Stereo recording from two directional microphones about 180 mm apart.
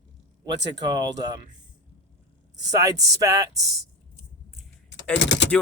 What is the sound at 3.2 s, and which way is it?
Speech, 20° right (ahead or behind).